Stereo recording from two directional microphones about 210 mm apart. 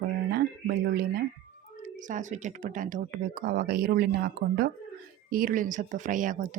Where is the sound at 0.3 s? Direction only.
50° right (ahead or behind).